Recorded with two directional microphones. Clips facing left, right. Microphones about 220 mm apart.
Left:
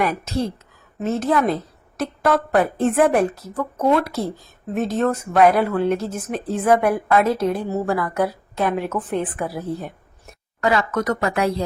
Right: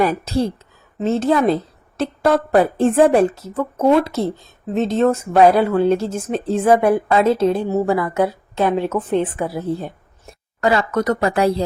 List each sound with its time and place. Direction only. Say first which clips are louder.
0.0 s a woman's voice: right 4 dB; 30° right (ahead or behind)